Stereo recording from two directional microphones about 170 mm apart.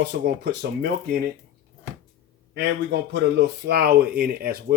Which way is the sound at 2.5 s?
80° right.